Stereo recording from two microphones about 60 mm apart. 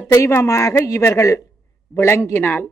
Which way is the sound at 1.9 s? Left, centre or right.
Left.